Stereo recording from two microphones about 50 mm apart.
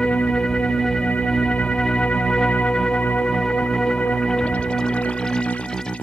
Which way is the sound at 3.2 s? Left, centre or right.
Centre.